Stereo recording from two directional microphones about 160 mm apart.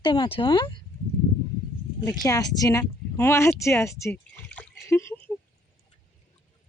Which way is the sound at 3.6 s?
20° left (ahead or behind).